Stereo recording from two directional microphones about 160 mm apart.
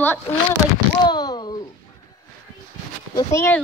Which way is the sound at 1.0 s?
25° left (ahead or behind).